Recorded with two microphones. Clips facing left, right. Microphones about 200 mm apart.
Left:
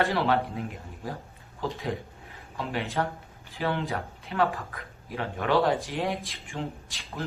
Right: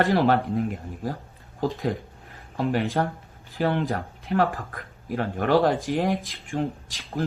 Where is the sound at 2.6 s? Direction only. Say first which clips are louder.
Right 6 dB; 45° right (ahead or behind).